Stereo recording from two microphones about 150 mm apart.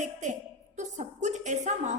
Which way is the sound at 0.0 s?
55° right (ahead or behind).